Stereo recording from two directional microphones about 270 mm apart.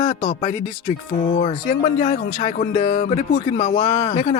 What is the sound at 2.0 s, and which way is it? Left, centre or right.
Speech, left.